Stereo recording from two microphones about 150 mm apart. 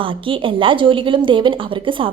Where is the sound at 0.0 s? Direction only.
35° right (ahead or behind).